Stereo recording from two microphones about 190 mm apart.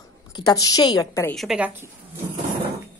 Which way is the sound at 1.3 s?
5° right (ahead or behind).